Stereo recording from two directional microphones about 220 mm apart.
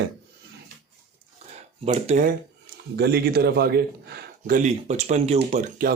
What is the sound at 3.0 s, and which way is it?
A man's voice, 50° right (ahead or behind).